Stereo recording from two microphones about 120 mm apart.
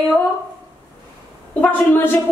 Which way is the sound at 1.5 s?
15° left (ahead or behind).